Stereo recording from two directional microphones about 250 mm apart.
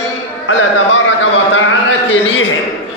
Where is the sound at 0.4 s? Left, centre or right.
Left.